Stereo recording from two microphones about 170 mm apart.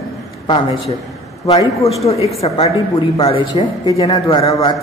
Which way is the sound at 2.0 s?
35° left (ahead or behind).